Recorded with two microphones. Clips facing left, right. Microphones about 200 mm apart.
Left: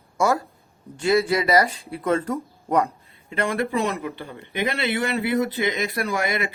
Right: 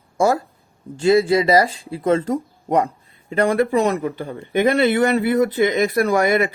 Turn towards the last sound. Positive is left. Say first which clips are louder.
# right 8 dB
turn(degrees=-45)  # may be behind; listen again after turning